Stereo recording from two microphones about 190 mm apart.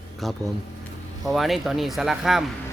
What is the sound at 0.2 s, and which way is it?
A man's voice, centre (ahead or behind).